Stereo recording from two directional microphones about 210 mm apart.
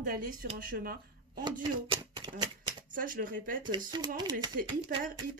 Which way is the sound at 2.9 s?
40° right (ahead or behind).